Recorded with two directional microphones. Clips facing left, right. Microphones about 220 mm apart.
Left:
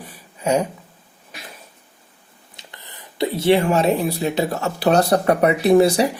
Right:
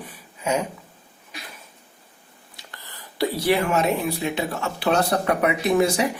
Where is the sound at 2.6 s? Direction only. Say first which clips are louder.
Left 1 dB; 20° left (ahead or behind).